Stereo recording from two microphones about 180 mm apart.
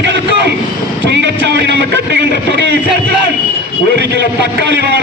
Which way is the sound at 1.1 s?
70° right (ahead or behind).